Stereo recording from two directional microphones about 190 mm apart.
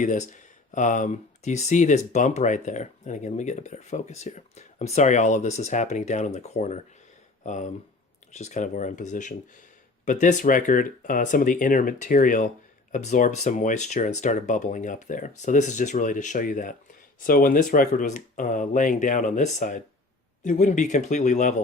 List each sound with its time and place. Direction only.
0.0 s speech: 40° left (ahead or behind)